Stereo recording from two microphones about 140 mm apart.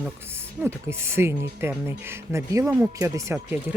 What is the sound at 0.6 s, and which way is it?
Speech, 20° right (ahead or behind).